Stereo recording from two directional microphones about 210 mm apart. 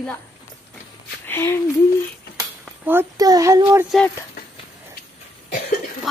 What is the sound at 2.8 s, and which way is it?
Speech, 10° right (ahead or behind).